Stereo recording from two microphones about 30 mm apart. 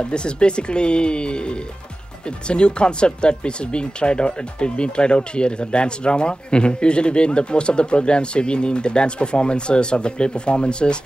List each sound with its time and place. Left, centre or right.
0.0 s speech: left